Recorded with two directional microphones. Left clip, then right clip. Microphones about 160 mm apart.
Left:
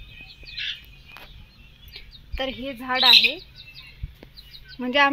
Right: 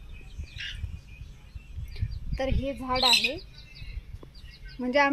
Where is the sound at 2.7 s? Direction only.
25° left (ahead or behind).